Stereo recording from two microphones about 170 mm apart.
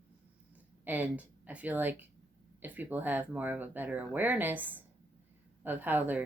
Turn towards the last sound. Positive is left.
turn(degrees=-10)  # may be behind; listen again after turning